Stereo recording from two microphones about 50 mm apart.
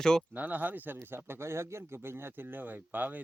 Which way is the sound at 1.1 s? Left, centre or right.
Right.